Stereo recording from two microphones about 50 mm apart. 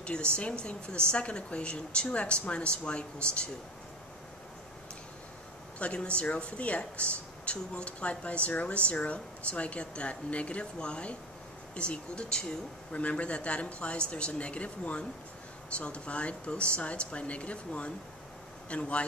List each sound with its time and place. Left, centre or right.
0.0 s speech: left
5.8 s speech: left